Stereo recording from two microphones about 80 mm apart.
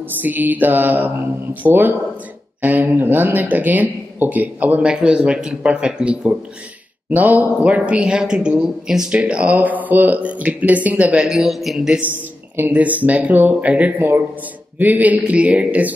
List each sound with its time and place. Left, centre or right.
0.2 s speech: right
7.1 s a man's voice: right; by 12.0 s centre
12.5 s speech: right